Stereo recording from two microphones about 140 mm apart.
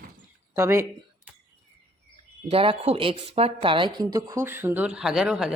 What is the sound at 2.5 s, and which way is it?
Speech, 40° right (ahead or behind).